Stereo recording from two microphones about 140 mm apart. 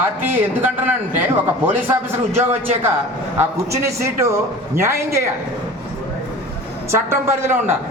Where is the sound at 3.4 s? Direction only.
20° right (ahead or behind).